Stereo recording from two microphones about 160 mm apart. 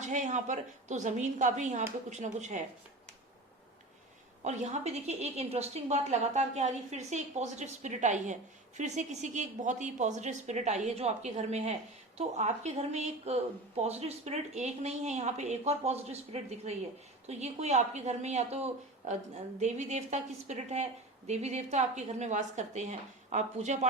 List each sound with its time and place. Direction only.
0.0 s a woman's voice: 50° right (ahead or behind)
4.4 s a woman's voice: 45° right (ahead or behind)